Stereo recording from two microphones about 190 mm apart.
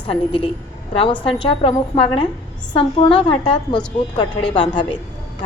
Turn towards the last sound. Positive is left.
turn(degrees=25)  # may be behind; listen again after turning